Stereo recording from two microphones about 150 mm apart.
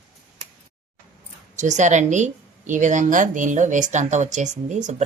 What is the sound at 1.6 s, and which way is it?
A woman's voice, 50° right (ahead or behind).